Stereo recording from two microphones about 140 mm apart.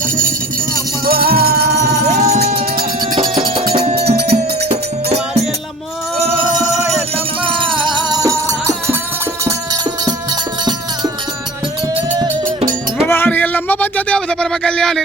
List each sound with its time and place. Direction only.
1.0 s music: 90° right
2.0 s music: 55° right (ahead or behind)
3.8 s music: 50° right (ahead or behind)
6.6 s music: 55° right (ahead or behind)
7.5 s music: 35° right (ahead or behind)
13.1 s a sound: 15° left (ahead or behind)